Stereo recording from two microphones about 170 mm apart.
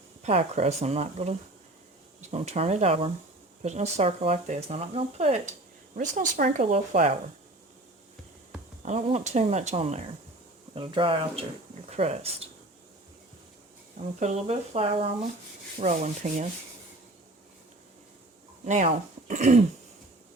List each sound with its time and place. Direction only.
0.2 s speech: 40° right (ahead or behind)
6.0 s rub: 50° right (ahead or behind)
6.6 s speech: 40° right (ahead or behind)
8.8 s speech: 40° right (ahead or behind)
14.0 s speech: 40° right (ahead or behind)
15.8 s rub: 45° right (ahead or behind)
18.6 s speech: 45° right (ahead or behind)